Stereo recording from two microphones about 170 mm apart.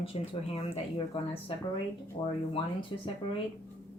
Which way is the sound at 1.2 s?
35° left (ahead or behind).